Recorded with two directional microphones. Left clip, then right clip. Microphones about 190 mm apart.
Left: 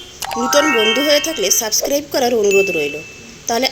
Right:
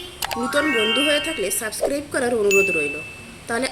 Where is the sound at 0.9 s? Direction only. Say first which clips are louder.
Left 5 dB; 15° left (ahead or behind).